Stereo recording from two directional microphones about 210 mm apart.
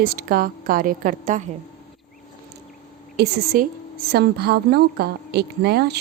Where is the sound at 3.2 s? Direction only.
50° right (ahead or behind).